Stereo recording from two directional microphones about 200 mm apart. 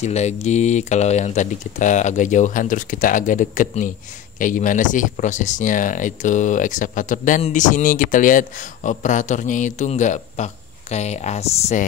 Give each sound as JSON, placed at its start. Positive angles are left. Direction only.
{"t": 0.0, "sound": "speech", "side_deg": 35}